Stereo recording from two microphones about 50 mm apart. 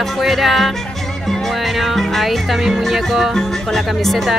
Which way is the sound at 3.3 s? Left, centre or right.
Centre.